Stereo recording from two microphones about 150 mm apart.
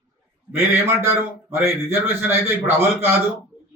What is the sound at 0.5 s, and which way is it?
A man's voice, 15° right (ahead or behind).